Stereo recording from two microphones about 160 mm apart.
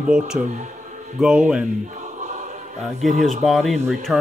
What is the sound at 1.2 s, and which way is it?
Speech, 5° right (ahead or behind).